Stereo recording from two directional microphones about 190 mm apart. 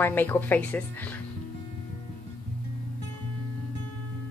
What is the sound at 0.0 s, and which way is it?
Speech, 10° left (ahead or behind).